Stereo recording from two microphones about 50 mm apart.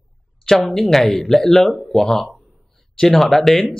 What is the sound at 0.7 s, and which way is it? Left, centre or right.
Speech, centre.